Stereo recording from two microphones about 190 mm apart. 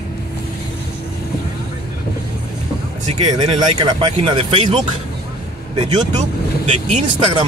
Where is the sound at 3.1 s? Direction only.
25° right (ahead or behind).